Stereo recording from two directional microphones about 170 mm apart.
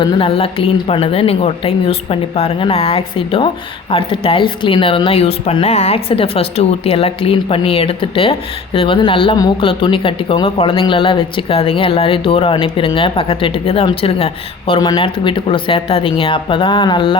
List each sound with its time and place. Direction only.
0.0 s a woman's voice: 30° left (ahead or behind)
14.7 s a woman's voice: 25° left (ahead or behind)